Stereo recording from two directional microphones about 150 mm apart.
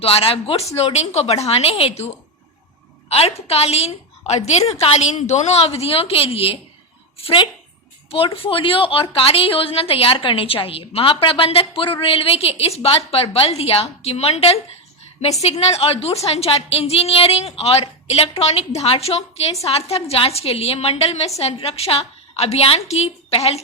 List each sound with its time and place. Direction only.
0.0 s a woman's voice: 40° left (ahead or behind)
3.1 s a woman's voice: 40° left (ahead or behind)